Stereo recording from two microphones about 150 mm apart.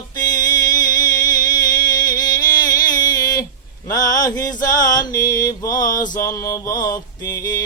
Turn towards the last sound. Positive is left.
turn(degrees=25)  # may be behind; listen again after turning